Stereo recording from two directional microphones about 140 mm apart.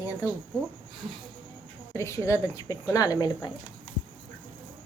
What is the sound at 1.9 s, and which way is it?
Speech, 20° left (ahead or behind).